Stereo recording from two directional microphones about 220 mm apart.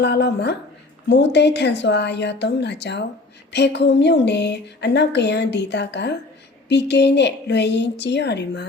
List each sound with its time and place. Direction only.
0.0 s a woman's voice: 50° left (ahead or behind)